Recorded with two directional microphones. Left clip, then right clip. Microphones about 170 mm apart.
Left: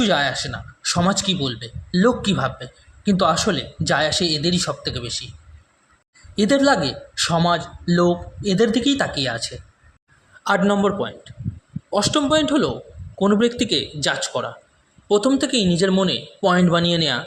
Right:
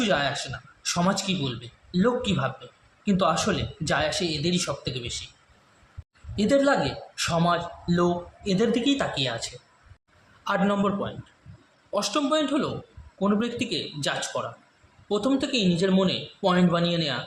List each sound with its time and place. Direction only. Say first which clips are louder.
0.0 s speech: left 5 dB; 30° left (ahead or behind)
6.3 s speech: left 5 dB; 40° left (ahead or behind)
10.4 s speech: left 6 dB; 45° left (ahead or behind)